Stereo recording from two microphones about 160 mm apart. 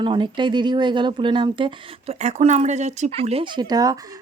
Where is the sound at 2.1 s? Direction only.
45° right (ahead or behind).